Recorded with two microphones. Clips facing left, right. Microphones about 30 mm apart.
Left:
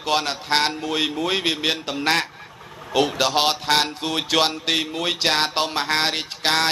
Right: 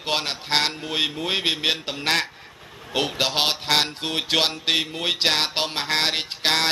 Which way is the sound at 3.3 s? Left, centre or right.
Centre.